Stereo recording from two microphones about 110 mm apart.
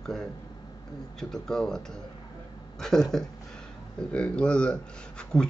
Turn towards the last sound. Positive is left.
turn(degrees=10)  # may be behind; listen again after turning